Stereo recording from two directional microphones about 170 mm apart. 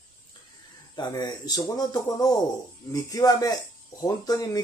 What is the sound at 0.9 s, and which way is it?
Speech, 25° left (ahead or behind).